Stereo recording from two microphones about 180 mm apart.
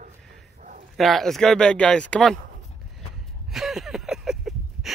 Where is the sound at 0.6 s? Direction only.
45° right (ahead or behind).